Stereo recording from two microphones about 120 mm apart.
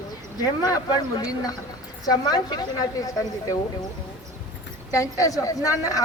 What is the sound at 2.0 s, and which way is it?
A woman's voice, 35° left (ahead or behind).